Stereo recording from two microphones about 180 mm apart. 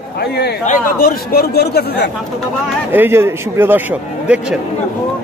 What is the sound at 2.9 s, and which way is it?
Speech, 10° right (ahead or behind).